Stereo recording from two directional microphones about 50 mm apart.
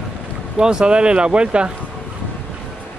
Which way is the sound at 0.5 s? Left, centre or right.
Centre.